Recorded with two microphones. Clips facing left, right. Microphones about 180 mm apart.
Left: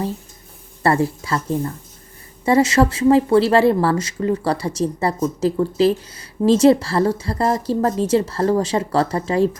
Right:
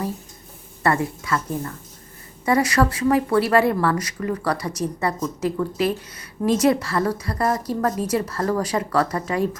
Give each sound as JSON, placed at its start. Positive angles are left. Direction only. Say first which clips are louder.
{"t": 0.8, "sound": "speech", "louder": "left 4 dB", "side_deg": 30}